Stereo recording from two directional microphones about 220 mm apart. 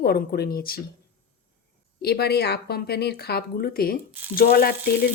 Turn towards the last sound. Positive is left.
turn(degrees=40)  # may be behind; listen again after turning